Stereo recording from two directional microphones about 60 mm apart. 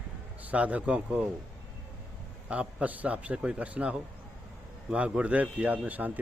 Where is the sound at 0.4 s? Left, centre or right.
Right.